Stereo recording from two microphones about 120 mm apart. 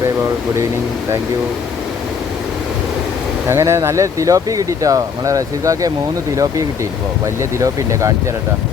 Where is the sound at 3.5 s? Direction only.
25° right (ahead or behind).